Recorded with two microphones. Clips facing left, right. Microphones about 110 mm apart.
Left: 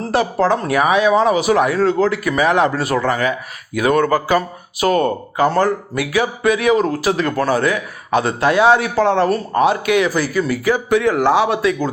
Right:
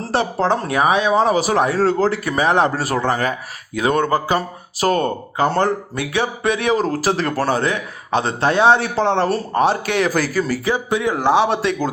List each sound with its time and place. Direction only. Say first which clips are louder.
0.0 s speech: left 3 dB; 30° right (ahead or behind)
3.8 s speech: left 2 dB; 25° right (ahead or behind)
4.8 s speech: left 2 dB; 35° right (ahead or behind)
10.7 s speech: left 4 dB; 20° right (ahead or behind)